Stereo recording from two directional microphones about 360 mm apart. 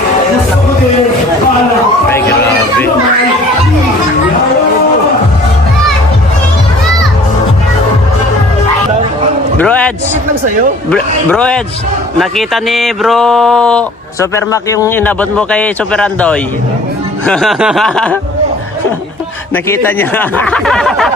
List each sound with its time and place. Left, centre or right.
9.6 s a sound: centre
10.9 s speech: centre
19.6 s speech: centre